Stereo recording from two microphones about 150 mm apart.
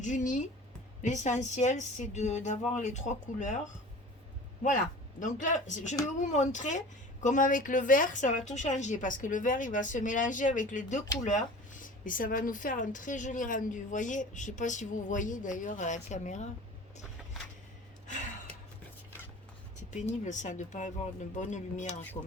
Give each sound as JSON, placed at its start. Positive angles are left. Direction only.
{"t": 0.0, "sound": "speech", "side_deg": 55}
{"t": 5.2, "sound": "speech", "side_deg": 55}
{"t": 20.2, "sound": "speech", "side_deg": 55}